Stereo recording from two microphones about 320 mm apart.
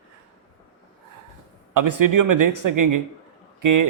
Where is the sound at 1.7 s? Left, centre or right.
Right.